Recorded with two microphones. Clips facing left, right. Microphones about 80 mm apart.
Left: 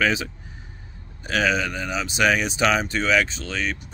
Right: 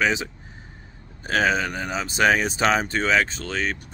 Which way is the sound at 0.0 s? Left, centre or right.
Right.